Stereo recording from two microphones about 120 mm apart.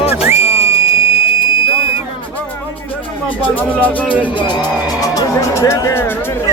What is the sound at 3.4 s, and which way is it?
Speech, 10° left (ahead or behind).